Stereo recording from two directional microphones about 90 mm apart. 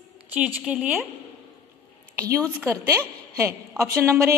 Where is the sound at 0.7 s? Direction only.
10° right (ahead or behind).